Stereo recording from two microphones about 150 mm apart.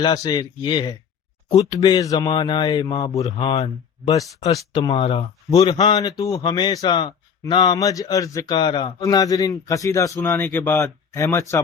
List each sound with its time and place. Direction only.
0.0 s a man's voice: 25° left (ahead or behind)
1.5 s speech: 40° left (ahead or behind)
1.8 s a man's voice: 25° left (ahead or behind)
4.9 s speech: 40° left (ahead or behind)
5.5 s a man's voice: 25° left (ahead or behind)